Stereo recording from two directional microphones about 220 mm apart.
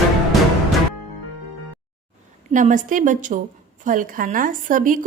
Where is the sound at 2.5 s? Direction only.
35° right (ahead or behind).